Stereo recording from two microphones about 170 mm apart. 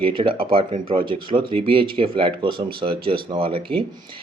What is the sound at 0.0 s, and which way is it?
Speech, 30° right (ahead or behind).